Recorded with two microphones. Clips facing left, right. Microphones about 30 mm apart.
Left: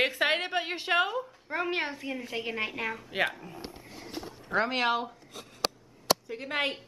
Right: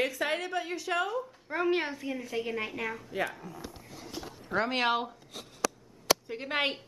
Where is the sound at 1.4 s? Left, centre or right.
Centre.